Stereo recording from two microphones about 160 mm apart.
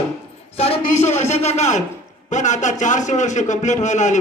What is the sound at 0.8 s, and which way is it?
A man's voice, 50° left (ahead or behind).